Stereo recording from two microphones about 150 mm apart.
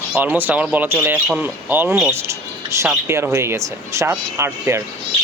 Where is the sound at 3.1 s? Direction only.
15° right (ahead or behind).